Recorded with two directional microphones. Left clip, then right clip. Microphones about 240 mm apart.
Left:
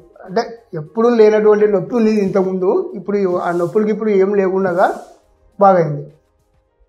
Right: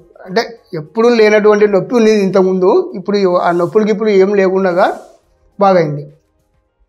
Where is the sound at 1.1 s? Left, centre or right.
Right.